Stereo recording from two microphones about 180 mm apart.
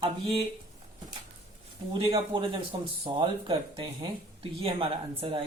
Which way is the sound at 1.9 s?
30° right (ahead or behind).